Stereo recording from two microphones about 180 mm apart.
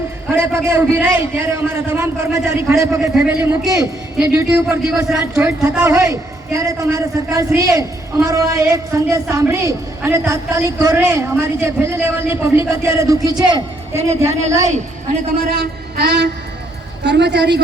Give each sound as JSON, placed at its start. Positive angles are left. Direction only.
{"t": 0.3, "sound": "a woman's voice", "side_deg": -15}
{"t": 4.2, "sound": "a woman's voice", "side_deg": -5}
{"t": 5.8, "sound": "a man's voice", "side_deg": -20}
{"t": 15.5, "sound": "a sound", "side_deg": -60}
{"t": 17.0, "sound": "a woman's voice", "side_deg": -75}